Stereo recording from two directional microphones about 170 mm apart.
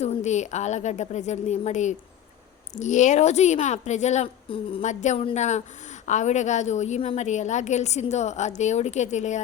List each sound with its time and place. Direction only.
0.0 s a woman's voice: 40° left (ahead or behind)
4.9 s a woman's voice: 45° left (ahead or behind)